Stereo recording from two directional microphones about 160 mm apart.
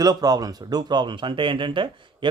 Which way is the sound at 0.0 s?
25° right (ahead or behind).